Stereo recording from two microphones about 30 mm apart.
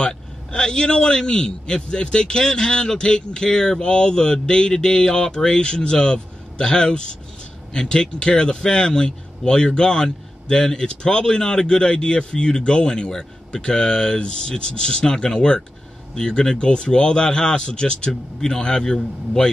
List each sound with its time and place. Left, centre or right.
0.0 s a man's voice: left